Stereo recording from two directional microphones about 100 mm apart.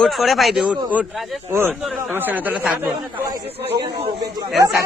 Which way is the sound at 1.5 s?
25° right (ahead or behind).